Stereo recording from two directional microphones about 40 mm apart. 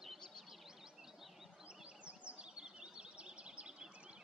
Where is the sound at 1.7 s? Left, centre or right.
Right.